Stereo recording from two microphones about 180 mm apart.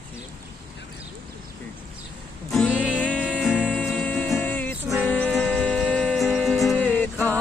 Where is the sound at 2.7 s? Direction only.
5° right (ahead or behind).